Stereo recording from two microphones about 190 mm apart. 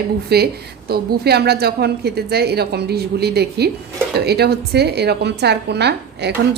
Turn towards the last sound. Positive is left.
turn(degrees=-60)  # may be behind; listen again after turning